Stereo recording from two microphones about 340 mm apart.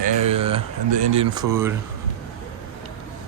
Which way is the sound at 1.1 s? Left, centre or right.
Centre.